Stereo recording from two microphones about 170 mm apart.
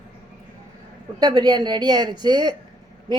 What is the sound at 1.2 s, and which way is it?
A woman's voice, 25° right (ahead or behind).